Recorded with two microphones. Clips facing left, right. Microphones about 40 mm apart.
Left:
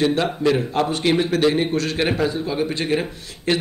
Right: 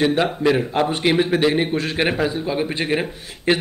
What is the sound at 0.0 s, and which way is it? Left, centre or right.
A man's voice, centre.